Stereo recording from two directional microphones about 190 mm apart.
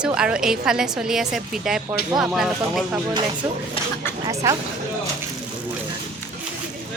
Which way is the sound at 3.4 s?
20° right (ahead or behind).